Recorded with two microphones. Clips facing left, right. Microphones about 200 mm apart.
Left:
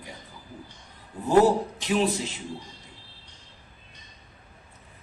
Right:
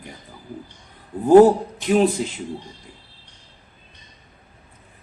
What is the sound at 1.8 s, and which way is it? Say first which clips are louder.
Speech: right 7 dB; 55° right (ahead or behind).